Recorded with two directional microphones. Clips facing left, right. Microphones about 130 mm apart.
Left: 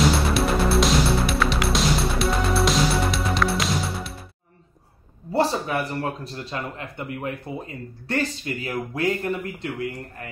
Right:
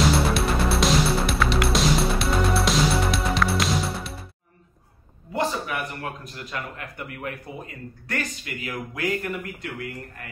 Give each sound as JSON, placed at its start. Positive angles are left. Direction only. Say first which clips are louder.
{"t": 0.0, "sound": "music", "louder": "left 1 dB", "side_deg": 0}
{"t": 5.3, "sound": "speech", "louder": "left 4 dB", "side_deg": 35}